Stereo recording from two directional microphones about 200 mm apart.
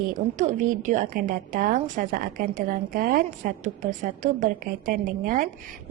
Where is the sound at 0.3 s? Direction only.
35° right (ahead or behind).